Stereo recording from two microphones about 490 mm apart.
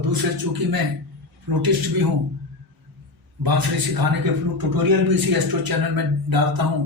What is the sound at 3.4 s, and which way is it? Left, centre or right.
Speech, right.